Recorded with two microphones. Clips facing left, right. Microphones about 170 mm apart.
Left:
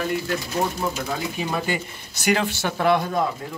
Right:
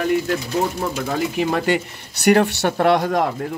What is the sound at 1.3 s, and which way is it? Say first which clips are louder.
Speech: right 7 dB; 75° right (ahead or behind).